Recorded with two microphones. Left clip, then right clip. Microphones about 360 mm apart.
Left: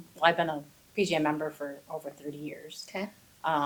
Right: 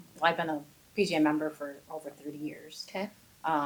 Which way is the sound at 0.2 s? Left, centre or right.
Left.